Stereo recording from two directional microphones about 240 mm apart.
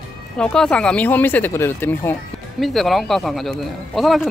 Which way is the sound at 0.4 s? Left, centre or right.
Centre.